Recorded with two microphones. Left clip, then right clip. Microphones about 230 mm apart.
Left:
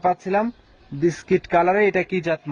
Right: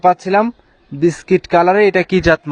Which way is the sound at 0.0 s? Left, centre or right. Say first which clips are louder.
Right 8 dB; right.